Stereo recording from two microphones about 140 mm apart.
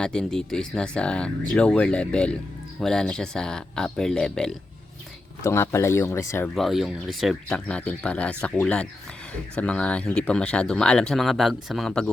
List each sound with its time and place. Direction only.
0.0 s speech: 5° left (ahead or behind)
5.4 s speech: 20° left (ahead or behind)
6.5 s speech: centre (ahead or behind)